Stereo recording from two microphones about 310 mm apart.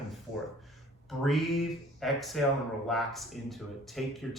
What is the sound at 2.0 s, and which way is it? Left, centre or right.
Speech, centre.